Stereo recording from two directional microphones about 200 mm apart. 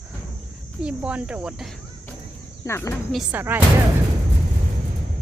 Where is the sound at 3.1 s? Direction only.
5° right (ahead or behind).